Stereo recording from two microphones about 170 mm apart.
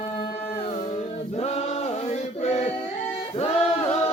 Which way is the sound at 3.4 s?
35° left (ahead or behind).